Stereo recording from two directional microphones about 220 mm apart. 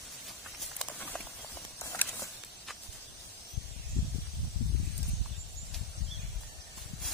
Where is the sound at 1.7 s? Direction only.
10° left (ahead or behind).